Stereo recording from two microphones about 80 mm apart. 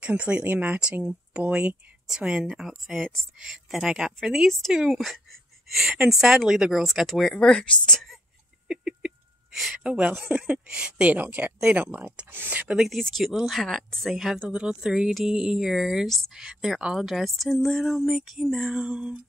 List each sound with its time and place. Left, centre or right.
0.0 s speech: centre
8.6 s a sound: centre
9.8 s speech: centre
12.7 s speech: centre